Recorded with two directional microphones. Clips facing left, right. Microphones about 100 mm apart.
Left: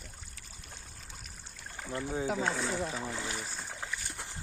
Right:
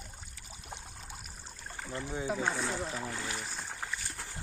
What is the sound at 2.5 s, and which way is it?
Speech, centre (ahead or behind).